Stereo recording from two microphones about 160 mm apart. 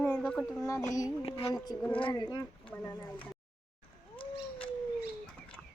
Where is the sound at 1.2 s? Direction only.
35° left (ahead or behind).